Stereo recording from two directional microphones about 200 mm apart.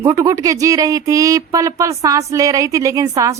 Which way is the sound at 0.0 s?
15° right (ahead or behind).